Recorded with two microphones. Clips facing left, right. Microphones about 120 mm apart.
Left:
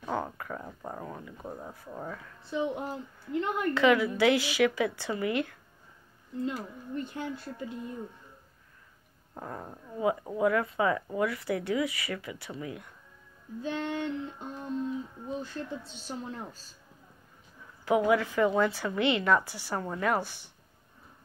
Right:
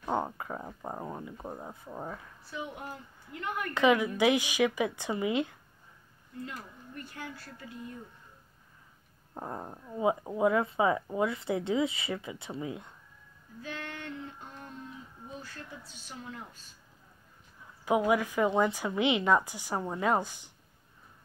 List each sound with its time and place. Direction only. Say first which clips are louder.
0.0 s speech: right 1 dB; 20° right (ahead or behind)
2.4 s a woman's voice: left 9 dB; 25° left (ahead or behind)
3.7 s speech: even; 20° right (ahead or behind)
6.4 s a woman's voice: left 9 dB; 20° left (ahead or behind)
9.3 s speech: right 1 dB; 20° right (ahead or behind)
13.6 s a woman's voice: left 9 dB; 20° left (ahead or behind)
15.2 s a woman's voice: left 6 dB; 25° left (ahead or behind)
17.8 s speech: left 2 dB; 15° right (ahead or behind)